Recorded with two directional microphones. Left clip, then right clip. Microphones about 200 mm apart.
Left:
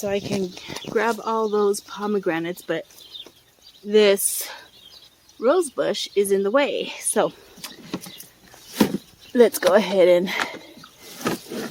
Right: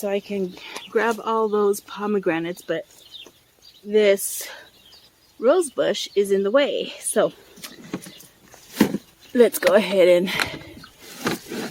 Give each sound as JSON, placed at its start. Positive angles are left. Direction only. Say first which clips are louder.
{"t": 0.0, "sound": "speech", "louder": "even", "side_deg": 0}
{"t": 3.8, "sound": "speech", "louder": "left 1 dB", "side_deg": 20}
{"t": 9.3, "sound": "a sound", "louder": "even", "side_deg": 5}